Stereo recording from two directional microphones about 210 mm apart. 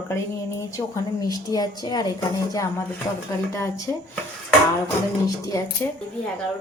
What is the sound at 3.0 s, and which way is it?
Speech, 15° left (ahead or behind).